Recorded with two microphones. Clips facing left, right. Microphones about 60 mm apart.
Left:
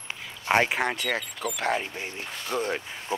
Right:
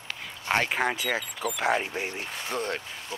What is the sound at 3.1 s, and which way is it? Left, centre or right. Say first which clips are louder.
Speech: left 8 dB; left.